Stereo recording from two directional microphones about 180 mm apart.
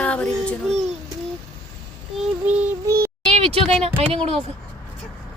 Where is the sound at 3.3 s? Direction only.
35° right (ahead or behind).